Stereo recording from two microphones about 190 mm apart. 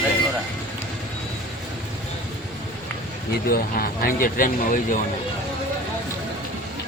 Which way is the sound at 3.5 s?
50° left (ahead or behind).